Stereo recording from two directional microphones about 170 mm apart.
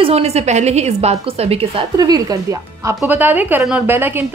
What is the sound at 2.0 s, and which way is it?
A woman's voice, 20° right (ahead or behind).